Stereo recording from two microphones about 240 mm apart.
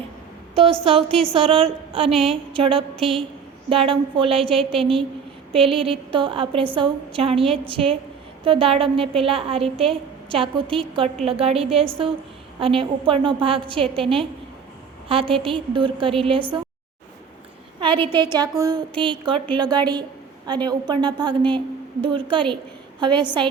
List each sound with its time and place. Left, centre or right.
0.5 s a woman's voice: right
2.9 s a woman's voice: centre
3.7 s a woman's voice: right
4.4 s a woman's voice: centre
4.8 s a woman's voice: right
11.5 s a woman's voice: centre
12.5 s a woman's voice: right
15.1 s a woman's voice: right
17.7 s a woman's voice: right
18.6 s a sound: centre
22.0 s a woman's voice: right